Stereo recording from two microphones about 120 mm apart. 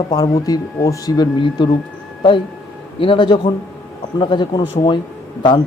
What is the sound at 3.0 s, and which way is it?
Speech, 45° left (ahead or behind).